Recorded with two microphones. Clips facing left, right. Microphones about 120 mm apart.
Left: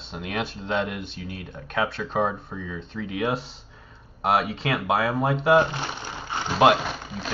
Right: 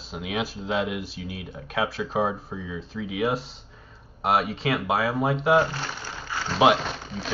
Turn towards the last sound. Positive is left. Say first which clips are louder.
# left 1 dB
turn(degrees=5)  # may be behind; listen again after turning